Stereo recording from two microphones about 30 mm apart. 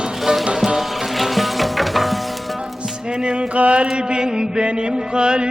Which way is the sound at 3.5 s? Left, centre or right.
Right.